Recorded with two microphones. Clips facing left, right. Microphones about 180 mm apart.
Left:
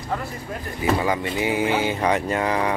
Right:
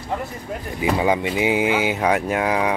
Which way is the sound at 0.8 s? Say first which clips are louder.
Right 2 dB; 15° right (ahead or behind).